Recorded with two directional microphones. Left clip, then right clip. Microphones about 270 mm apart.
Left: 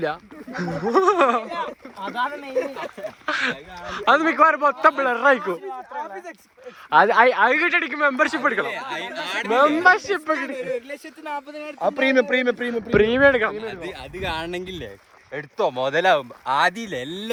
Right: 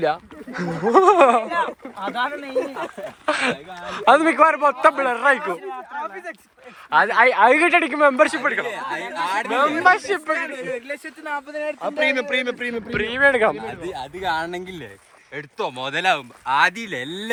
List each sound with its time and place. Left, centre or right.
0.0 s speech: centre
6.9 s speech: centre
10.8 s speech: centre
11.8 s speech: left
13.0 s speech: centre
13.4 s speech: centre
14.2 s speech: left
17.1 s speech: left